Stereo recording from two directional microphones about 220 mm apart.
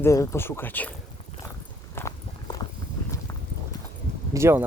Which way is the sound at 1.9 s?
15° left (ahead or behind).